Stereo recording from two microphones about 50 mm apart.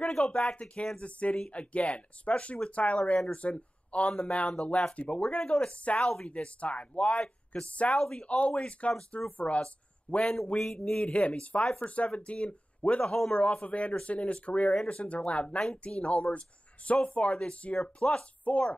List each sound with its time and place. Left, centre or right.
0.0 s speech: centre
10.3 s speech: centre
10.9 s speech: centre